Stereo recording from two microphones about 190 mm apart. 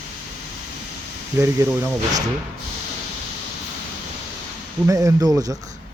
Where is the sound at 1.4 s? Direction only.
15° right (ahead or behind).